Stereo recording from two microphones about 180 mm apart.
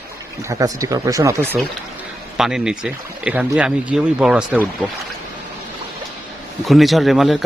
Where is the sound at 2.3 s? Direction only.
5° right (ahead or behind).